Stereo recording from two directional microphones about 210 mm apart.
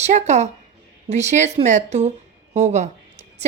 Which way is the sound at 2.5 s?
35° right (ahead or behind).